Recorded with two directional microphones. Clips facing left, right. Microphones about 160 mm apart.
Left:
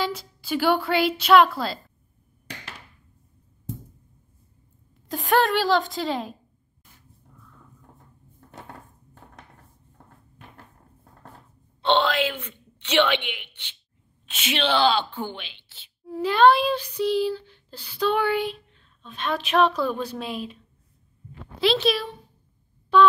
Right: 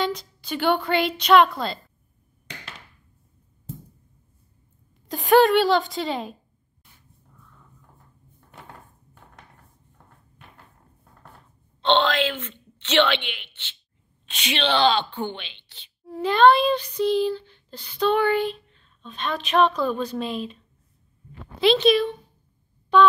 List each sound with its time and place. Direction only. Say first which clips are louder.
0.0 s speech: right 2 dB; 5° left (ahead or behind)
5.0 s speech: right 5 dB; centre (ahead or behind)
11.8 s speech: right 1 dB; 10° left (ahead or behind)
21.5 s speech: right 4 dB; centre (ahead or behind)